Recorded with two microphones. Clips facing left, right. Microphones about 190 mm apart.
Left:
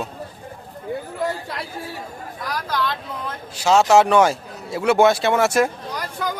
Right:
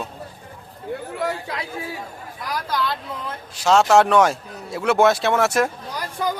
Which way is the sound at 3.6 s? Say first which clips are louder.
Left 1 dB; centre (ahead or behind).